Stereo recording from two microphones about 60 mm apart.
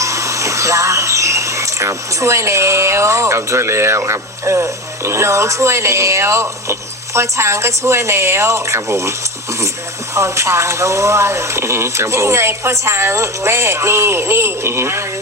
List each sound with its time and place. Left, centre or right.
0.0 s speech: right
10.2 s speech: right